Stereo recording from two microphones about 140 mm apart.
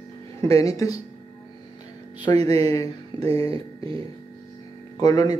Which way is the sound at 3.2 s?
45° right (ahead or behind).